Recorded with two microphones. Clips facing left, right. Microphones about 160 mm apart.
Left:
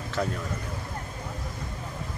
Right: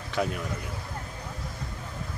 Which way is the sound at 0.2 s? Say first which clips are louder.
Right 1 dB; 10° right (ahead or behind).